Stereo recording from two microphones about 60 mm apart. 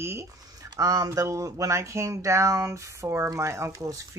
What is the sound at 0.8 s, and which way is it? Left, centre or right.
Speech, right.